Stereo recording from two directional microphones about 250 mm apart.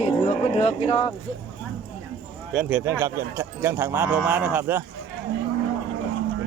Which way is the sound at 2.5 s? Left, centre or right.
Centre.